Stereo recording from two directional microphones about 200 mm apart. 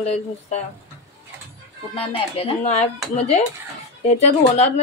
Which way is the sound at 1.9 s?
30° left (ahead or behind).